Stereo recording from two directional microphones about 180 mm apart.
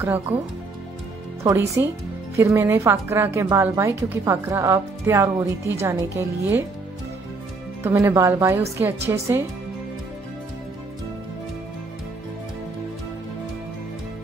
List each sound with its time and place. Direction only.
0.0 s speech: 10° right (ahead or behind)
1.4 s speech: 15° right (ahead or behind)
7.8 s speech: 15° right (ahead or behind)